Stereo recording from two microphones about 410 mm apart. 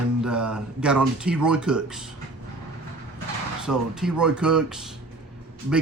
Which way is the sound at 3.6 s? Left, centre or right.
Centre.